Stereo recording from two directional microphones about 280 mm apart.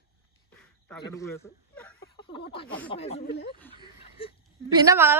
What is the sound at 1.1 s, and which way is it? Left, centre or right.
A man's voice, centre.